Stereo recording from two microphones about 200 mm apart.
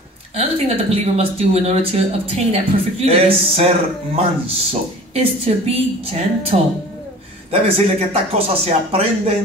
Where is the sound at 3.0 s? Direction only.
30° right (ahead or behind).